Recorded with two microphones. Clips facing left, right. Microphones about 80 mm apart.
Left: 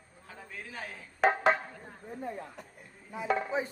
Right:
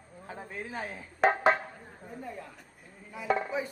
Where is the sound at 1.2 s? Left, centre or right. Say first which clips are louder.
Right 1 dB; centre.